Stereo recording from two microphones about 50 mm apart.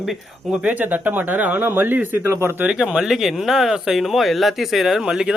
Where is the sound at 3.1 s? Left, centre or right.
Centre.